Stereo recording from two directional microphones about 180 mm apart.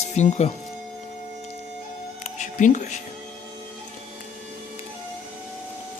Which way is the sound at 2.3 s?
40° left (ahead or behind).